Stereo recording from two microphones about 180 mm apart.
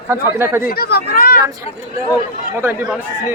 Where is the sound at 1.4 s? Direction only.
15° right (ahead or behind).